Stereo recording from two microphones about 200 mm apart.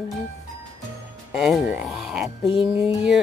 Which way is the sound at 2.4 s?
25° left (ahead or behind).